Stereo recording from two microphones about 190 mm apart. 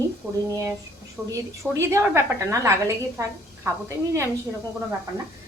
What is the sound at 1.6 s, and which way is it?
A woman's voice, 5° right (ahead or behind).